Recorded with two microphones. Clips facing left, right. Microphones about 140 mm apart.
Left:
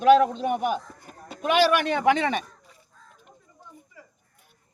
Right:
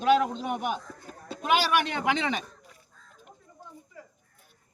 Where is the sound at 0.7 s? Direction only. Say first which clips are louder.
Left 4 dB; 10° left (ahead or behind).